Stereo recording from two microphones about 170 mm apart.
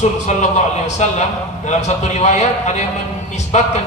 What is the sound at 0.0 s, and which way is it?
A man's voice, 40° left (ahead or behind).